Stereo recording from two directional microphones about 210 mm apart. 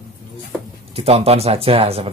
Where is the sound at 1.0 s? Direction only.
30° right (ahead or behind).